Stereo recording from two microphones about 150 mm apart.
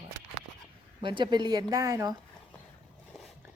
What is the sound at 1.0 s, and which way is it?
Speech, 30° right (ahead or behind).